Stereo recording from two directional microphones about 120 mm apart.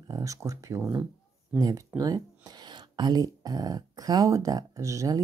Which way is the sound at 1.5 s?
30° right (ahead or behind).